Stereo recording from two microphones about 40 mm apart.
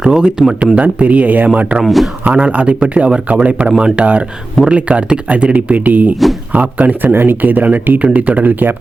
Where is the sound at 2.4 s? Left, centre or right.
Right.